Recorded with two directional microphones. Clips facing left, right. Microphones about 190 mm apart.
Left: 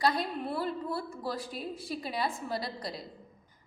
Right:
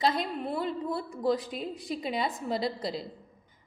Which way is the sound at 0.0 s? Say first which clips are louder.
Right 1 dB; 20° right (ahead or behind).